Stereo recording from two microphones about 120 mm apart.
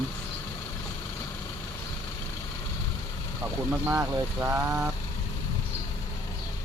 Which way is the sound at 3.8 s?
20° right (ahead or behind).